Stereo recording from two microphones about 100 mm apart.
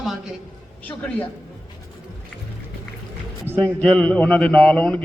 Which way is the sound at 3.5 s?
20° right (ahead or behind).